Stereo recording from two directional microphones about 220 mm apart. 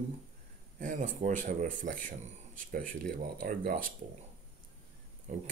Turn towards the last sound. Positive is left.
turn(degrees=-35)  # may be behind; listen again after turning